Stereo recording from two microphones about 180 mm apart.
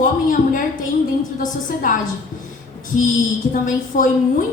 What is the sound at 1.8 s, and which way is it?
Speech, 50° left (ahead or behind).